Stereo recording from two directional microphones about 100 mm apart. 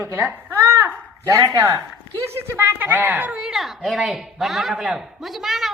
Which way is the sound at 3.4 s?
5° right (ahead or behind).